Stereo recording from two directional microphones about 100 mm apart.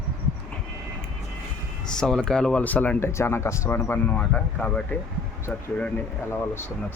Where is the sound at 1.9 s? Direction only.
5° left (ahead or behind).